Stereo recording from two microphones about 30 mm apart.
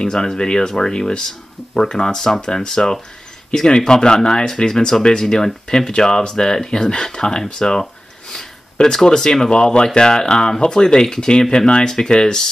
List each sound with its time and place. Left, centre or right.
0.0 s speech: left
7.8 s a sound: centre
9.0 s speech: left